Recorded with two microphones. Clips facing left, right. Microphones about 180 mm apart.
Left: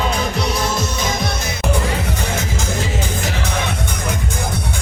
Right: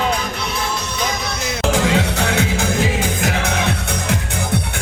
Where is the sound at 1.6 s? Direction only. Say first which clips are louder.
Right 5 dB; 90° right; by 2.6 s 70° right (ahead or behind).